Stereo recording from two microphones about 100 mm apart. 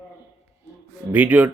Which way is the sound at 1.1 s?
15° right (ahead or behind).